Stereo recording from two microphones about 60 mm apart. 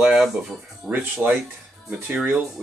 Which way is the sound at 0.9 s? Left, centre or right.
Right.